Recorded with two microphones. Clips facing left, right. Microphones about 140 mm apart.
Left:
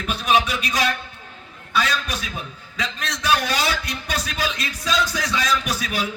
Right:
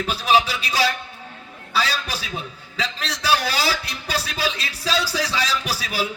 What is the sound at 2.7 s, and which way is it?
A man's voice, 30° right (ahead or behind).